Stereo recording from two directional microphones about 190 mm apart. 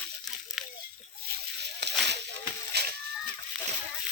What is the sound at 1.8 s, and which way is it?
Slosh, 60° right (ahead or behind).